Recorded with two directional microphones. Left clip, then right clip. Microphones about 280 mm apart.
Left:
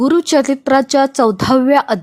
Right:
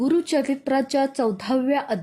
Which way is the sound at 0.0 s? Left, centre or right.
Left.